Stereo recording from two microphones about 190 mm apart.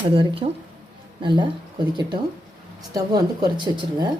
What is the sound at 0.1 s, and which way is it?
Speech, 30° right (ahead or behind).